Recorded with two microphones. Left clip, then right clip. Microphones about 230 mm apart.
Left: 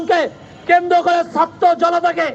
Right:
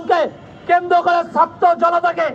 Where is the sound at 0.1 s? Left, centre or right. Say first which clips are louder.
Even; left.